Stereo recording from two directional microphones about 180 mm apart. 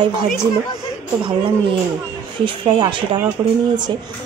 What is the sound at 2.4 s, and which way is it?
Speech, 25° right (ahead or behind).